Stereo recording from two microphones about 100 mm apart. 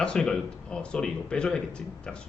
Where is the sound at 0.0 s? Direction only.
10° left (ahead or behind).